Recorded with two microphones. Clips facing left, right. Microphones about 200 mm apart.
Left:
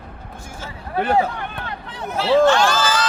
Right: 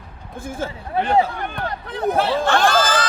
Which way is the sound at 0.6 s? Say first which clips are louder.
Right 9 dB; 55° right (ahead or behind).